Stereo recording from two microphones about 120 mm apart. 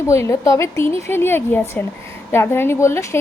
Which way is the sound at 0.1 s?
25° left (ahead or behind).